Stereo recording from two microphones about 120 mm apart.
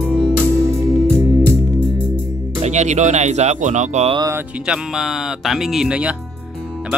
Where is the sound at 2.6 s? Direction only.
70° right (ahead or behind).